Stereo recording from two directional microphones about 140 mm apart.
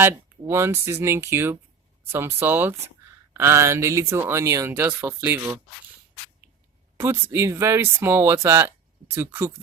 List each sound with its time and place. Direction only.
0.0 s speech: 15° right (ahead or behind)
6.9 s speech: 15° right (ahead or behind)